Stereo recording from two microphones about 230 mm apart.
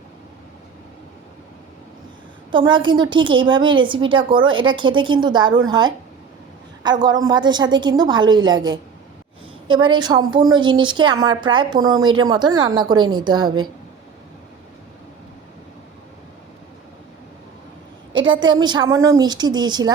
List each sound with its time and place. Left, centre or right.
2.5 s a woman's voice: right
18.1 s a sound: right
18.3 s a woman's voice: centre